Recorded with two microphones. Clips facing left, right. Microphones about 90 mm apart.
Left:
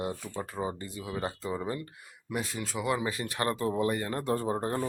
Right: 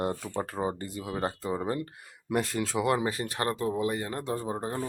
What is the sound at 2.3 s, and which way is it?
Speech, 90° right.